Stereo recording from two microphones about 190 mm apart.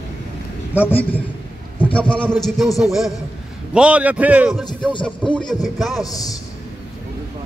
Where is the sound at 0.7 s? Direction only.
5° right (ahead or behind).